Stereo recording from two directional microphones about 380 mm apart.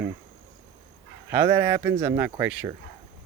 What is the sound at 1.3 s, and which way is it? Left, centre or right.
Speech, centre.